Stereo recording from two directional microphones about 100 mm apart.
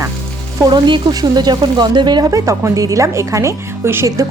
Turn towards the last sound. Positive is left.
turn(degrees=-25)  # may be behind; listen again after turning